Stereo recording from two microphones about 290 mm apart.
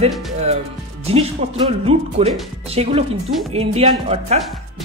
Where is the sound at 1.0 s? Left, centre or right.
Centre.